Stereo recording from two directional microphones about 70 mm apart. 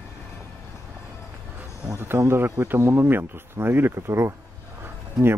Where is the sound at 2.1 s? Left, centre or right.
Right.